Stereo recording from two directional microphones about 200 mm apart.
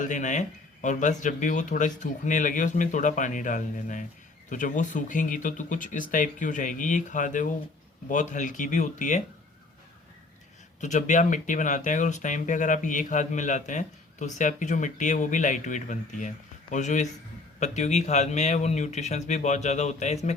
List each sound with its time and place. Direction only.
0.0 s speech: 40° left (ahead or behind)
10.8 s speech: 35° left (ahead or behind)